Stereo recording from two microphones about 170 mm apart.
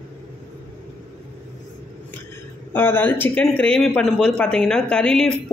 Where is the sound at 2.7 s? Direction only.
10° left (ahead or behind).